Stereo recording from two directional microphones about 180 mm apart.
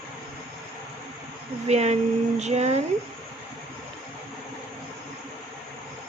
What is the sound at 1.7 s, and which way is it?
Speech, 35° right (ahead or behind).